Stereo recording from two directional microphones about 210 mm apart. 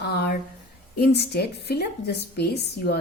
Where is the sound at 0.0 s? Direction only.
50° left (ahead or behind).